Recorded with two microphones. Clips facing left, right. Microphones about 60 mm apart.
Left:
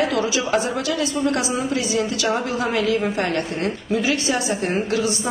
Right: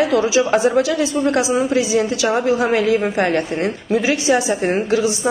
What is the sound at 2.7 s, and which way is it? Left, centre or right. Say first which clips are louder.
A woman's voice: right 4 dB; right.